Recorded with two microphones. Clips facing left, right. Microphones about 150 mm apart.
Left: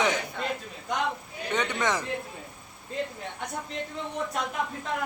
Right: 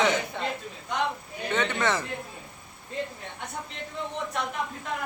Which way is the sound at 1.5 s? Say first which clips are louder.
Right 1 dB; 15° left (ahead or behind).